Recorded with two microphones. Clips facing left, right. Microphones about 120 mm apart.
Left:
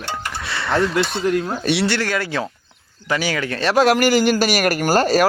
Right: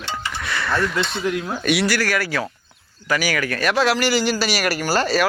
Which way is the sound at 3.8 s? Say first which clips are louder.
Left 6 dB; 45° left (ahead or behind).